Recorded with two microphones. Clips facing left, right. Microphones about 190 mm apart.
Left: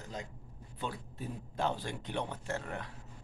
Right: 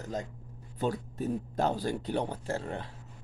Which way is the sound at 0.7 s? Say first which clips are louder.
Right 9 dB; 40° right (ahead or behind).